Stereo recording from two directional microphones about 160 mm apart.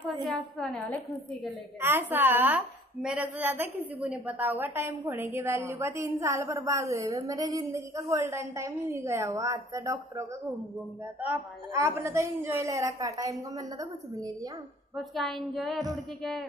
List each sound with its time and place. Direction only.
0.2 s a woman's voice: centre (ahead or behind)
1.8 s a woman's voice: 15° right (ahead or behind)
15.1 s a woman's voice: centre (ahead or behind)